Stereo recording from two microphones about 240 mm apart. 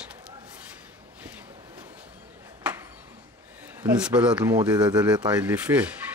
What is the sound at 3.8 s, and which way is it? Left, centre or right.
Speech, centre.